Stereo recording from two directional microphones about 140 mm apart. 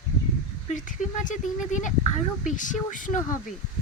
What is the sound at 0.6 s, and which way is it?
Speech, 65° left (ahead or behind).